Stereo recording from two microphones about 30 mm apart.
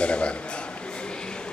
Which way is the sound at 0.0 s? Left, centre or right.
Left.